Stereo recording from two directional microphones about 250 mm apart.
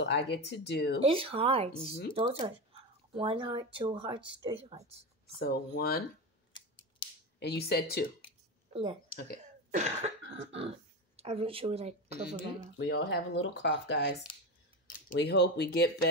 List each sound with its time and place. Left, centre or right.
0.0 s speech: left
1.0 s speech: right
5.4 s speech: left
6.5 s scissors: centre
7.3 s speech: left
9.7 s speech: right
10.2 s cough: right
11.1 s speech: right
12.7 s speech: left